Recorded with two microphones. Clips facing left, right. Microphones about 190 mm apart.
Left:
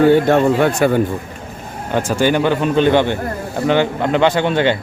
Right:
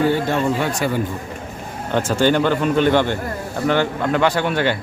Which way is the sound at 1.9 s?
15° left (ahead or behind).